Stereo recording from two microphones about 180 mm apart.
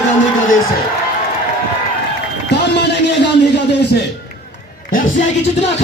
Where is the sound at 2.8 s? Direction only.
75° left (ahead or behind).